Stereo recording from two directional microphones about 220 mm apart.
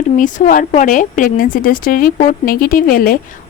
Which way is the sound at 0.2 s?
35° left (ahead or behind).